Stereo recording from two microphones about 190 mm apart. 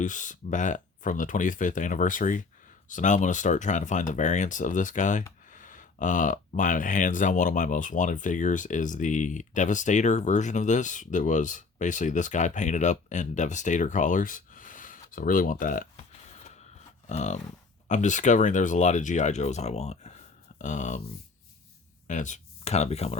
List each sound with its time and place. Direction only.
0.0 s speech: 40° left (ahead or behind)
17.1 s speech: 40° left (ahead or behind)
22.0 s speech: 40° left (ahead or behind)